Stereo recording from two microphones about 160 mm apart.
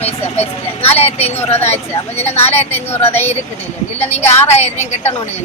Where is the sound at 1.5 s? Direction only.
15° left (ahead or behind).